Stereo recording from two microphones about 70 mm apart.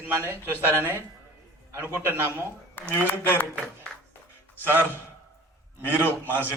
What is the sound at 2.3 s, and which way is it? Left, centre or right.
Speech, left.